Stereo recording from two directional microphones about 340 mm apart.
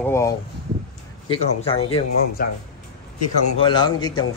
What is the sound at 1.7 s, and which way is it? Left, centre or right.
Speech, centre.